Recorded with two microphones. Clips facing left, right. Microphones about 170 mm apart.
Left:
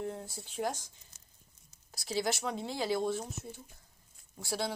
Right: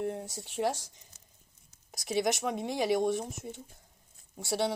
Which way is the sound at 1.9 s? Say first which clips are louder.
Right 4 dB; 70° right (ahead or behind).